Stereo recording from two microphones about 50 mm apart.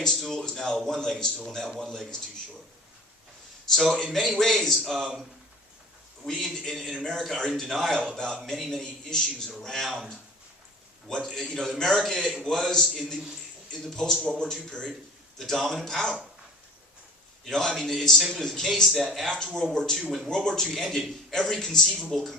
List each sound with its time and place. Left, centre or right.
0.0 s a man's voice: centre
3.7 s a man's voice: centre
6.2 s a man's voice: centre
8.5 s a man's voice: centre
8.8 s a man's voice: centre
11.2 s a man's voice: centre
13.9 s a man's voice: centre
15.4 s a man's voice: centre
17.4 s a man's voice: centre
18.9 s a man's voice: centre
19.2 s a man's voice: centre
20.7 s a man's voice: centre